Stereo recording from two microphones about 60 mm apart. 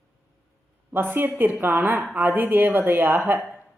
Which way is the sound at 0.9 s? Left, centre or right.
Right.